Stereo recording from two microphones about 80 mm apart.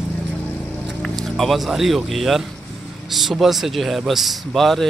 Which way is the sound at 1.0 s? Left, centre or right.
Centre.